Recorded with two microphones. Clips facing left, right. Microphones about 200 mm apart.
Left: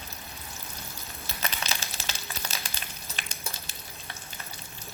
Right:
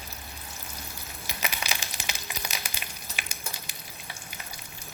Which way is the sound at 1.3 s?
15° right (ahead or behind).